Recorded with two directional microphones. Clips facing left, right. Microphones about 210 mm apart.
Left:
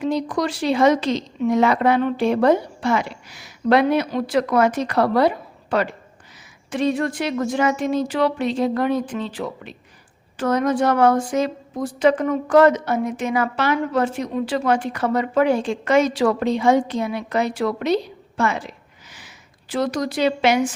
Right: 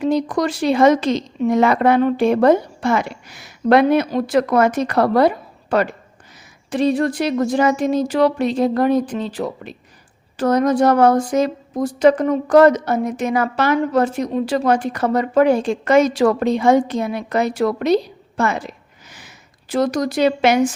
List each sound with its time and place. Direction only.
0.0 s speech: 45° right (ahead or behind)
6.7 s speech: 35° right (ahead or behind)
19.1 s a sound: 45° right (ahead or behind)